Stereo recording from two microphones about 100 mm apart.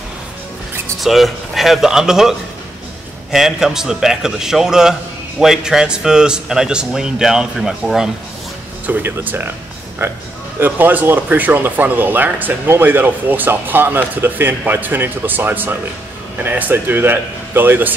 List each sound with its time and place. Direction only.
0.9 s a man's voice: centre (ahead or behind)
8.8 s speech: 20° right (ahead or behind)
10.6 s speech: 20° right (ahead or behind)